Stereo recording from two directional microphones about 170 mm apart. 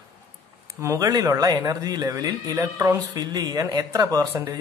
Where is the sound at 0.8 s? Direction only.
20° right (ahead or behind).